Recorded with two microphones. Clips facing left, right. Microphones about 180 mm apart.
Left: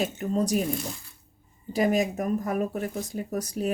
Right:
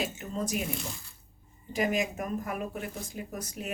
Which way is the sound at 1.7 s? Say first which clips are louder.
Left 5 dB; 35° left (ahead or behind).